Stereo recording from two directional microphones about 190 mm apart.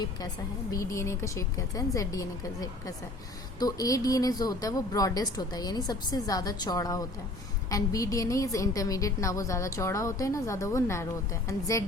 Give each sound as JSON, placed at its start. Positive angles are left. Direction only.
{"t": 0.7, "sound": "a woman's voice", "side_deg": 15}